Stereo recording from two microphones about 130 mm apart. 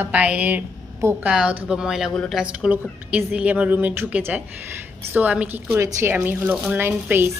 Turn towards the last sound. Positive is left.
turn(degrees=-15)  # may be behind; listen again after turning